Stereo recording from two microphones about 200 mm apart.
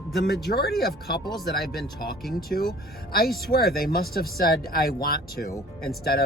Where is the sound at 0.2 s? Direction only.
55° left (ahead or behind).